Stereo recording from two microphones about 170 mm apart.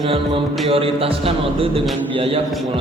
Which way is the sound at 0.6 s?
35° right (ahead or behind).